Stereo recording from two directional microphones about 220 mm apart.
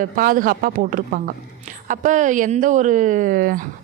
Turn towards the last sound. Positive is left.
turn(degrees=-40)  # may be behind; listen again after turning